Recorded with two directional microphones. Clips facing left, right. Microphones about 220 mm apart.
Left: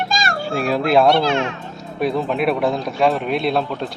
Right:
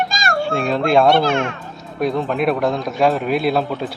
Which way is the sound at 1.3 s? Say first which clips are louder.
Right 1 dB; 50° right (ahead or behind).